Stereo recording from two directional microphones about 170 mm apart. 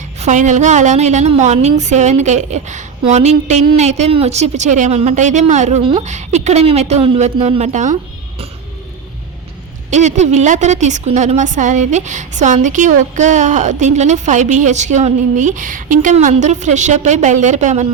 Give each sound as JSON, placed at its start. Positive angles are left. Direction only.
{"t": 0.2, "sound": "a woman's voice", "side_deg": -45}
{"t": 9.9, "sound": "a woman's voice", "side_deg": -45}